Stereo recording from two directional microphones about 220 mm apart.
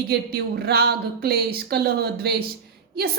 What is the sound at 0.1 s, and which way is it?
A woman's voice, 45° right (ahead or behind).